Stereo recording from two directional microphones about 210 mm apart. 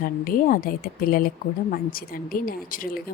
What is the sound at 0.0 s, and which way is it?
A woman's voice, 40° left (ahead or behind).